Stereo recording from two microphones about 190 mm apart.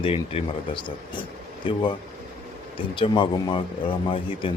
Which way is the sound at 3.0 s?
25° left (ahead or behind).